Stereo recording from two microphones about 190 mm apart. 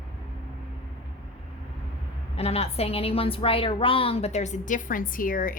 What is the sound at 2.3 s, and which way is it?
A woman's voice, 30° left (ahead or behind).